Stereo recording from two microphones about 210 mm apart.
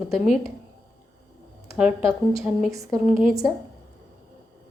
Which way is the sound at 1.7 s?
10° right (ahead or behind).